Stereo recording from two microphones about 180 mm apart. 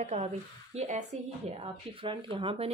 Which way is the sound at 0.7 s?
40° right (ahead or behind).